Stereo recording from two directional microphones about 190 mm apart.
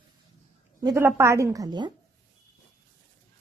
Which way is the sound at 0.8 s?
15° right (ahead or behind).